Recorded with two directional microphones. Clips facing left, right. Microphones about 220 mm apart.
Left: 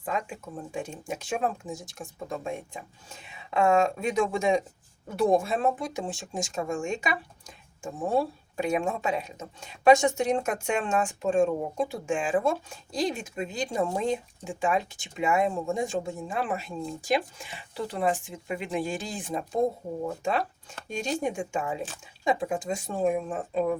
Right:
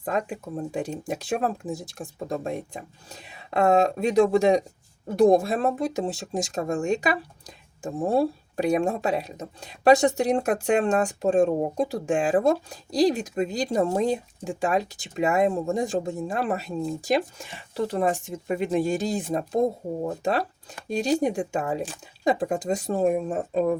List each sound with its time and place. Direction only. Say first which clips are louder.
0.0 s speech: right 5 dB; 40° right (ahead or behind)